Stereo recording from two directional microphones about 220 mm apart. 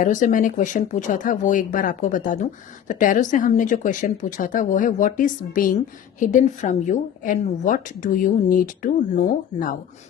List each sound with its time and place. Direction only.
0.0 s speech: 35° left (ahead or behind)